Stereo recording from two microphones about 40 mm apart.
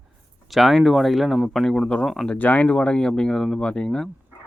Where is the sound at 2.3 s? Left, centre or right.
Left.